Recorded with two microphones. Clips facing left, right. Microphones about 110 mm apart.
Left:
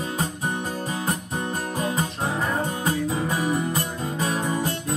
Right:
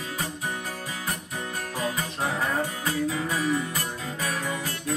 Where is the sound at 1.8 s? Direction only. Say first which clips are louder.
Left 1 dB; 20° left (ahead or behind).